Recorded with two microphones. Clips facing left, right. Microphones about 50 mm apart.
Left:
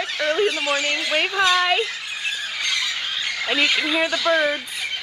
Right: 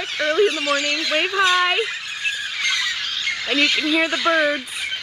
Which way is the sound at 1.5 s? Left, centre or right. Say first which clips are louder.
Right 1 dB; centre.